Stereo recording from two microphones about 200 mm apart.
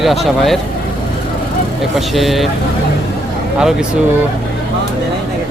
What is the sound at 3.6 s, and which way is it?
Speech, 5° right (ahead or behind).